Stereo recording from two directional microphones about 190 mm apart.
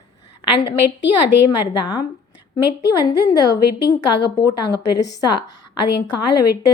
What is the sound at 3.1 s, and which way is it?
Speech, 20° left (ahead or behind).